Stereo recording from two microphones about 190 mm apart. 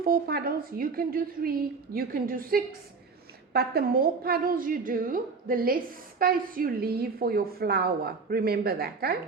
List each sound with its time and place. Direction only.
0.0 s a woman's voice: 50° right (ahead or behind)